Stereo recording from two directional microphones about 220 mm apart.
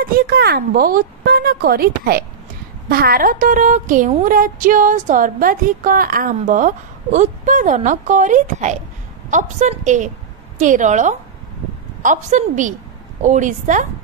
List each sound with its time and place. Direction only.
0.0 s a woman's voice: 45° right (ahead or behind)